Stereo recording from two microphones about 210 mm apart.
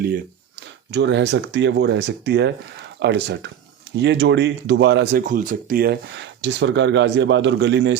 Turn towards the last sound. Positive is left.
turn(degrees=-55)  # may be behind; listen again after turning